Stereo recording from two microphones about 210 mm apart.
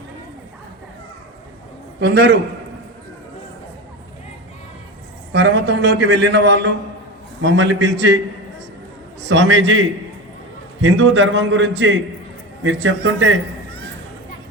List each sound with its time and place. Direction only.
2.0 s a man's voice: 50° right (ahead or behind)
5.3 s a man's voice: 55° right (ahead or behind)
9.2 s a man's voice: 60° right (ahead or behind)